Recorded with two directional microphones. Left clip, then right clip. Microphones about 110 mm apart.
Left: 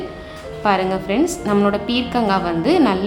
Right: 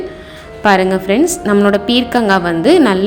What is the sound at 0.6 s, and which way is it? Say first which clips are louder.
A woman's voice: right 7 dB; 45° right (ahead or behind).